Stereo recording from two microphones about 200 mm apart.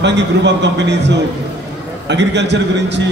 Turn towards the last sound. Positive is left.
turn(degrees=-60)  # may be behind; listen again after turning